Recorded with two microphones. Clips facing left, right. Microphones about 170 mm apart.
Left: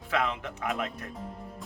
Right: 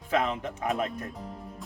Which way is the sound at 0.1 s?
25° right (ahead or behind).